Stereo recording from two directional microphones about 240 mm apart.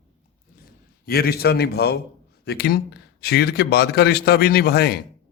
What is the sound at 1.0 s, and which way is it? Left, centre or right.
A man's voice, left.